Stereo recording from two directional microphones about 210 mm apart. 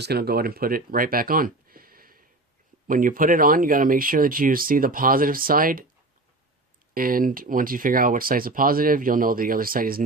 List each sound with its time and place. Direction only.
0.0 s speech: 50° right (ahead or behind)
6.9 s speech: 45° right (ahead or behind)